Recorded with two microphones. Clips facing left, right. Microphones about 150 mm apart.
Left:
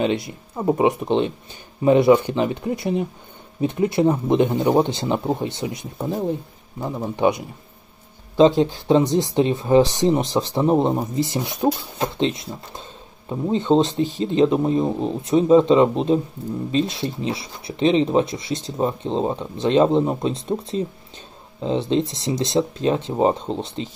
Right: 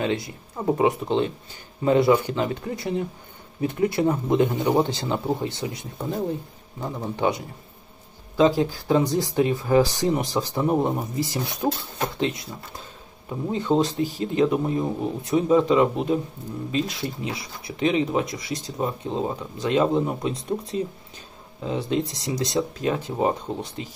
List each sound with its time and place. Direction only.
0.0 s a man's voice: 20° left (ahead or behind)